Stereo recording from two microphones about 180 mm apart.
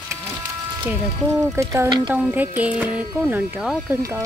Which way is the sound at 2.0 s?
10° right (ahead or behind).